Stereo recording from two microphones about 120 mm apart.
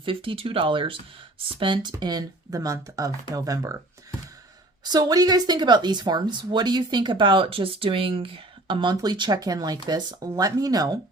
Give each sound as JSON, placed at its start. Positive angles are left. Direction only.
{"t": 0.0, "sound": "speech", "side_deg": -45}
{"t": 4.8, "sound": "speech", "side_deg": -35}